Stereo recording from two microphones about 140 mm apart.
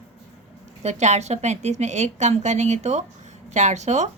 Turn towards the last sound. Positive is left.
turn(degrees=-55)  # may be behind; listen again after turning